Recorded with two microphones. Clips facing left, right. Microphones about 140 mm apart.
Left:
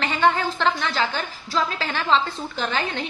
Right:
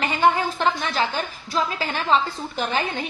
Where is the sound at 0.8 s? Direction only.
20° right (ahead or behind).